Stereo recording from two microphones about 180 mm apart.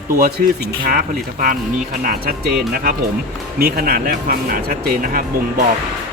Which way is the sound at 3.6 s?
60° right (ahead or behind).